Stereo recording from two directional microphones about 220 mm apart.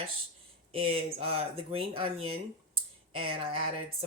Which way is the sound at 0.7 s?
25° right (ahead or behind).